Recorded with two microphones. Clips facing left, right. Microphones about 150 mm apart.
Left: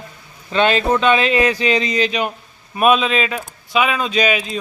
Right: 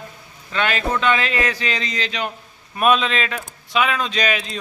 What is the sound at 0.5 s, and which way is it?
A man's voice, 25° left (ahead or behind).